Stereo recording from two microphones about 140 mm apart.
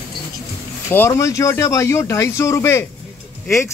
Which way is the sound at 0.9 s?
20° left (ahead or behind).